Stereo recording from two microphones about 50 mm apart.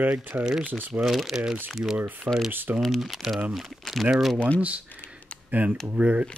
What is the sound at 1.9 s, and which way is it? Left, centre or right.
Speech, right.